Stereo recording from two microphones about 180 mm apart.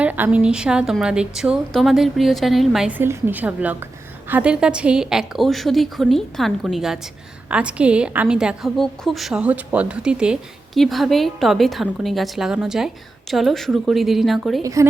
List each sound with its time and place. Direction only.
0.0 s a woman's voice: 10° right (ahead or behind)
3.0 s a woman's voice: 10° right (ahead or behind)
14.6 s a woman's voice: 20° right (ahead or behind)